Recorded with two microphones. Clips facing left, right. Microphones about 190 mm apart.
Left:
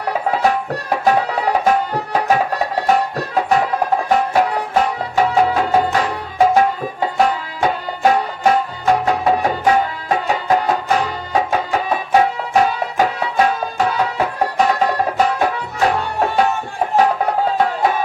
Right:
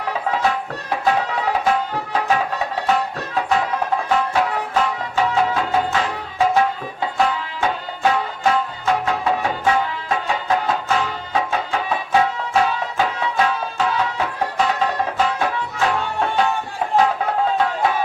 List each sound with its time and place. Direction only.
0.1 s music: 40° left (ahead or behind)